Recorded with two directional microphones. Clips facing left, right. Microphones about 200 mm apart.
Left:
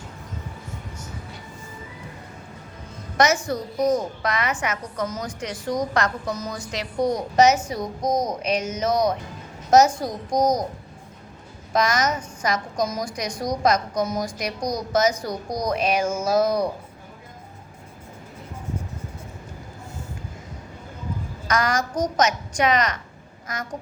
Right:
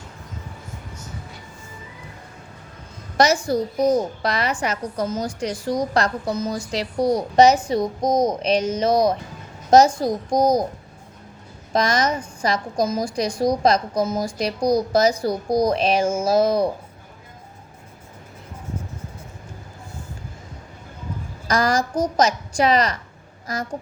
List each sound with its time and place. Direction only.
3.2 s a woman's voice: 30° right (ahead or behind)
11.7 s a woman's voice: 30° right (ahead or behind)
21.4 s a woman's voice: 30° right (ahead or behind)